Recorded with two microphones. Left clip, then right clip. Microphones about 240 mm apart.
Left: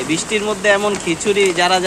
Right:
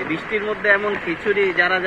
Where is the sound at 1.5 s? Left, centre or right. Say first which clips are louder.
Left 3 dB; left.